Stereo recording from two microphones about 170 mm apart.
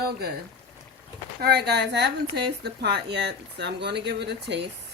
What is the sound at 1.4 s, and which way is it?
Speech, 75° right (ahead or behind).